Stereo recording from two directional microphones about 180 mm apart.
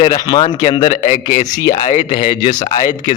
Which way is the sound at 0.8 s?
45° left (ahead or behind).